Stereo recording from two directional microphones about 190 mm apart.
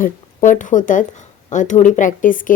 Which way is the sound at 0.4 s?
40° left (ahead or behind).